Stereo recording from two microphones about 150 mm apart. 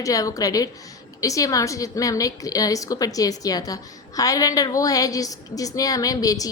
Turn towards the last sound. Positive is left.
turn(degrees=25)  # may be behind; listen again after turning